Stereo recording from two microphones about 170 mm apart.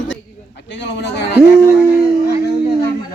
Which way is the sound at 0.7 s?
90° left.